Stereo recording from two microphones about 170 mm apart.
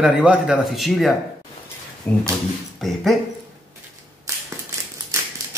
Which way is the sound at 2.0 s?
10° left (ahead or behind).